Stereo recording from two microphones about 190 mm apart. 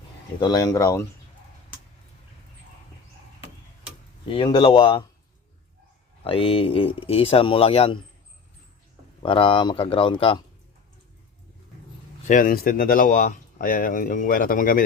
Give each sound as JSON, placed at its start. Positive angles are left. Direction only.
{"t": 0.3, "sound": "speech", "side_deg": 20}
{"t": 4.3, "sound": "speech", "side_deg": 30}
{"t": 6.2, "sound": "speech", "side_deg": 30}
{"t": 9.2, "sound": "speech", "side_deg": 25}
{"t": 12.3, "sound": "speech", "side_deg": 45}